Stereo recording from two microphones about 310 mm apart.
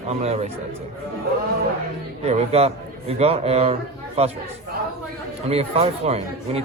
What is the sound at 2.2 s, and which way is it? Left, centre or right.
A man's voice, centre.